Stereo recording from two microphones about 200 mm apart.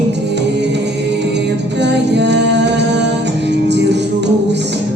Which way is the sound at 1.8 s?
60° right (ahead or behind).